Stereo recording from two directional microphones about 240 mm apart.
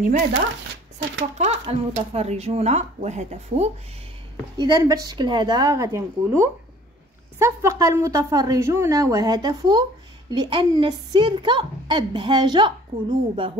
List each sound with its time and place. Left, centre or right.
1.4 s a woman's voice: right
4.6 s a woman's voice: centre